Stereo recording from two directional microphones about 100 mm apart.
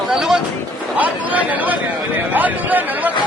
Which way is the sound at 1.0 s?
15° right (ahead or behind).